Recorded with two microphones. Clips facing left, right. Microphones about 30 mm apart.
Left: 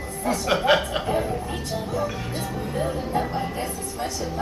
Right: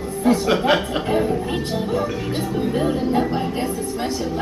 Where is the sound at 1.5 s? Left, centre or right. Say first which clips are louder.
Right 6 dB; right.